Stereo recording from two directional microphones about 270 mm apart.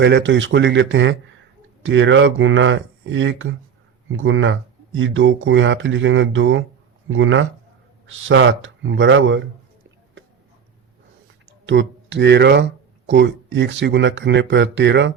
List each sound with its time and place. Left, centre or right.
0.0 s speech: right
11.6 s speech: right